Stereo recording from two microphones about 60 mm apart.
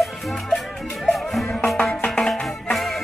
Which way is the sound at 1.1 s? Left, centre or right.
Centre.